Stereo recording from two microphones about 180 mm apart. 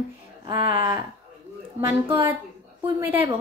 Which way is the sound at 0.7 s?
20° right (ahead or behind).